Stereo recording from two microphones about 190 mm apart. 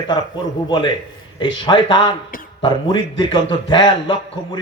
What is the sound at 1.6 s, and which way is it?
Speech, 25° left (ahead or behind).